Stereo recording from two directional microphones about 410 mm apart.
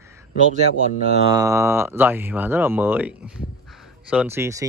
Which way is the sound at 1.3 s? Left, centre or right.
Centre.